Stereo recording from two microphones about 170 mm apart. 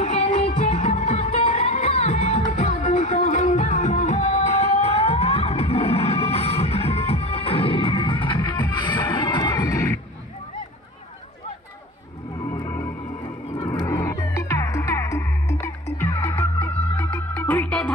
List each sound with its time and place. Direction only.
0.0 s music: 45° left (ahead or behind); by 9.9 s 20° left (ahead or behind)
12.4 s music: 10° left (ahead or behind)